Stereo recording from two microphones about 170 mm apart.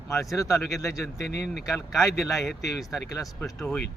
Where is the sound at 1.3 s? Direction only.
75° left (ahead or behind).